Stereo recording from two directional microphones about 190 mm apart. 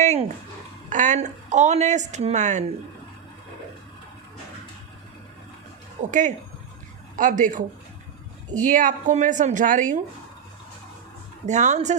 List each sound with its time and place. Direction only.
0.0 s dog: 40° right (ahead or behind)
0.9 s a woman's voice: 40° right (ahead or behind)
6.0 s a woman's voice: 40° right (ahead or behind)
11.4 s a woman's voice: 40° right (ahead or behind)